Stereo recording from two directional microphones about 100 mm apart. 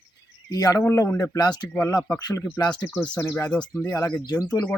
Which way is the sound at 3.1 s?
20° left (ahead or behind).